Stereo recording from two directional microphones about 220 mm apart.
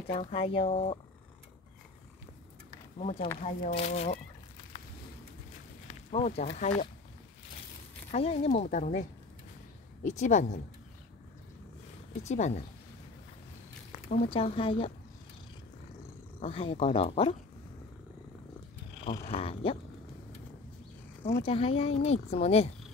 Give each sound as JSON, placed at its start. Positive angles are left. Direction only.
{"t": 0.1, "sound": "speech", "side_deg": 25}
{"t": 3.0, "sound": "speech", "side_deg": 30}
{"t": 6.1, "sound": "speech", "side_deg": 30}
{"t": 8.1, "sound": "speech", "side_deg": 30}
{"t": 10.0, "sound": "speech", "side_deg": 35}
{"t": 12.2, "sound": "speech", "side_deg": 30}
{"t": 14.0, "sound": "speech", "side_deg": 30}
{"t": 16.3, "sound": "speech", "side_deg": 25}
{"t": 18.9, "sound": "speech", "side_deg": 25}
{"t": 21.4, "sound": "speech", "side_deg": 25}